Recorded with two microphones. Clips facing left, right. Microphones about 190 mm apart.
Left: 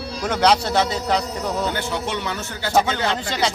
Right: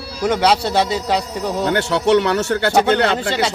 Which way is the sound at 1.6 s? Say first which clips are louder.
Right 7 dB; 70° right (ahead or behind).